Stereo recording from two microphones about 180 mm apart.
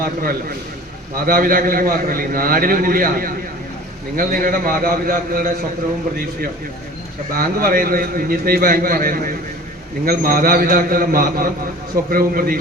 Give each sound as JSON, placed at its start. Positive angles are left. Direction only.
{"t": 0.0, "sound": "a man's voice", "side_deg": -55}
{"t": 7.3, "sound": "a man's voice", "side_deg": -55}